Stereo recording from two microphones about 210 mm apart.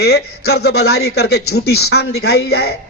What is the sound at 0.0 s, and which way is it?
A man's voice, 50° left (ahead or behind).